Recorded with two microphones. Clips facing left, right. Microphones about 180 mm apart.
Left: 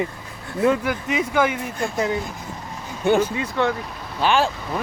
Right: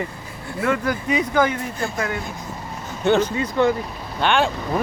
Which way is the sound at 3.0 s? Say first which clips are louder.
Even; 10° left (ahead or behind).